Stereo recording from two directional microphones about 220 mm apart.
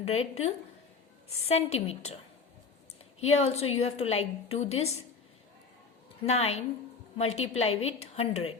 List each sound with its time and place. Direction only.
0.0 s a woman's voice: 30° left (ahead or behind)
3.2 s a woman's voice: 30° left (ahead or behind)
6.2 s a woman's voice: 30° left (ahead or behind)